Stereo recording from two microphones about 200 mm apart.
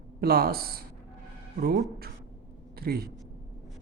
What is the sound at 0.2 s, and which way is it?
A man's voice, 50° right (ahead or behind).